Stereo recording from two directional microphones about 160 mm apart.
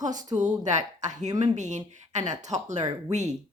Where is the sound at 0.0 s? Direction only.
50° right (ahead or behind).